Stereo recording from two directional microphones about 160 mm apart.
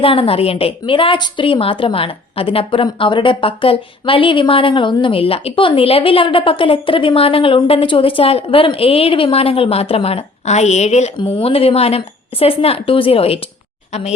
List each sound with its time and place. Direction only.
0.0 s a woman's voice: 35° left (ahead or behind)